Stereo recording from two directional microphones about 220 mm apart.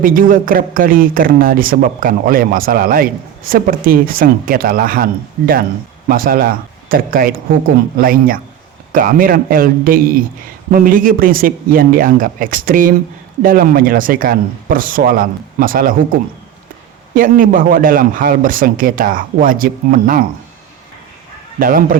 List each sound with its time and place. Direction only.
0.0 s a man's voice: 40° right (ahead or behind)
6.1 s a man's voice: 40° right (ahead or behind)
17.2 s a man's voice: 40° right (ahead or behind)
21.6 s a man's voice: 40° right (ahead or behind)